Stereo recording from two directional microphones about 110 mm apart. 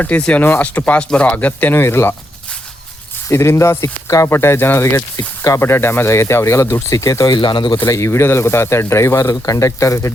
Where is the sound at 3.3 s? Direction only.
25° left (ahead or behind).